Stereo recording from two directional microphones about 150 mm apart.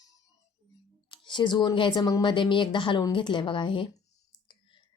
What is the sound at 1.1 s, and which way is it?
A woman's voice, 30° left (ahead or behind).